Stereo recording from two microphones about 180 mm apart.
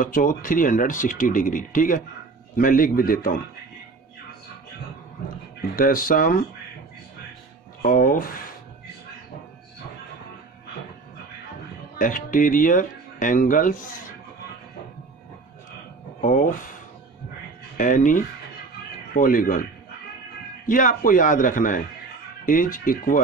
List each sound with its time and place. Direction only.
0.0 s speech: 50° left (ahead or behind)
5.8 s speech: 55° left (ahead or behind)
7.8 s speech: 50° left (ahead or behind)
12.0 s speech: 50° left (ahead or behind)
16.2 s speech: 50° left (ahead or behind)
17.7 s speech: 45° left (ahead or behind)
20.6 s speech: 50° left (ahead or behind)